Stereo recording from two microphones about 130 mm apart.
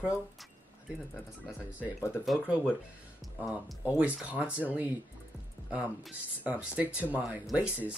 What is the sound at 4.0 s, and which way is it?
Speech, 10° right (ahead or behind).